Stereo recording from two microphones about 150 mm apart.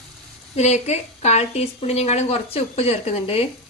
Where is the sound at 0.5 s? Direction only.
45° left (ahead or behind).